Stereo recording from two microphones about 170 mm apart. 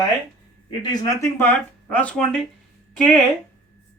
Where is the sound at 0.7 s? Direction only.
25° left (ahead or behind); by 3.2 s 5° left (ahead or behind).